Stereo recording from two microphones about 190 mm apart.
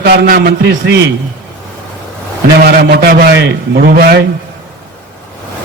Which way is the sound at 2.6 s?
55° right (ahead or behind).